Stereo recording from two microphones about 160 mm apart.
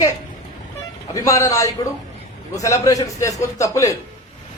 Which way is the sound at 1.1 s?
20° left (ahead or behind).